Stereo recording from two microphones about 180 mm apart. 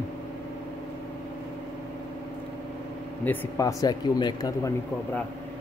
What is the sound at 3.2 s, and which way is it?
Speech, 15° left (ahead or behind).